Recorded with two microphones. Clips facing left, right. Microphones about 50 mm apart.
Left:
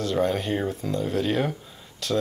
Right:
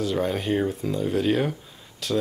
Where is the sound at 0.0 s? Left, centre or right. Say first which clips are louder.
Left 1 dB; centre.